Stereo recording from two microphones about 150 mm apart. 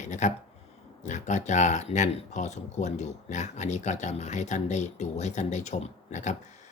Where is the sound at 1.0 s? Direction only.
50° left (ahead or behind).